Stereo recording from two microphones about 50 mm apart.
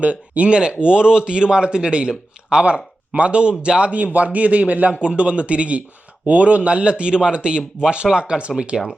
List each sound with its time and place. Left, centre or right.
0.0 s speech: right